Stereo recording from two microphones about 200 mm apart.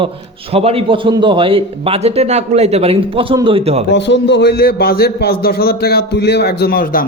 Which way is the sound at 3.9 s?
60° left (ahead or behind).